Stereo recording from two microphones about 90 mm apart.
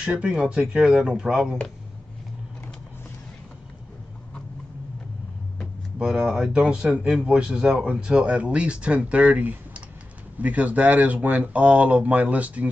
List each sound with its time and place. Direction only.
0.0 s speech: 10° right (ahead or behind)
5.9 s speech: 5° right (ahead or behind)